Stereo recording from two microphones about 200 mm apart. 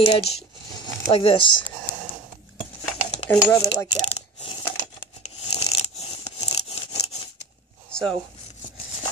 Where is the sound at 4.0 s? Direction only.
30° left (ahead or behind).